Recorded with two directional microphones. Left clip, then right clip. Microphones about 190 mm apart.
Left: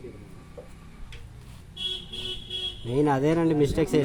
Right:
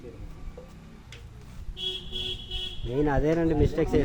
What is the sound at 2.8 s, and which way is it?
Speech, 65° left (ahead or behind).